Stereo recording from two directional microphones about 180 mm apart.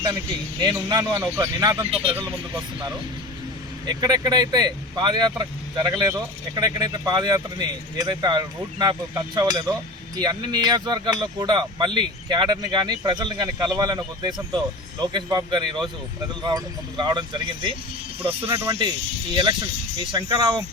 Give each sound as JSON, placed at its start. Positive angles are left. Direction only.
{"t": 0.6, "sound": "a man's voice", "side_deg": -20}
{"t": 3.8, "sound": "speech", "side_deg": -20}
{"t": 18.4, "sound": "speech", "side_deg": -15}